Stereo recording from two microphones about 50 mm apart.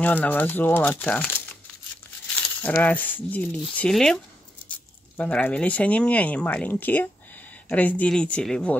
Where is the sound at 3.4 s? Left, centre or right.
Left.